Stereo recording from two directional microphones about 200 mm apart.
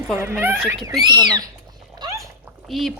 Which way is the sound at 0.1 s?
10° right (ahead or behind).